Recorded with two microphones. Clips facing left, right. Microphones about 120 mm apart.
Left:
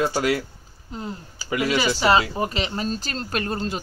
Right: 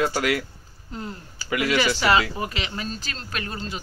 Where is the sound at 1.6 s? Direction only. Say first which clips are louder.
Even; 15° left (ahead or behind).